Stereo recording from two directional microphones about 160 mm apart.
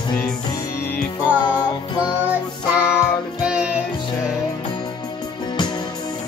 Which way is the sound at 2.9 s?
5° right (ahead or behind).